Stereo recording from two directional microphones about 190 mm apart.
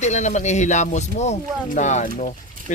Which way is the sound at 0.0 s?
40° left (ahead or behind).